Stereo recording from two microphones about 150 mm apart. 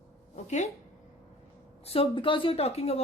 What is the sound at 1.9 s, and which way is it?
A woman's voice, 35° left (ahead or behind).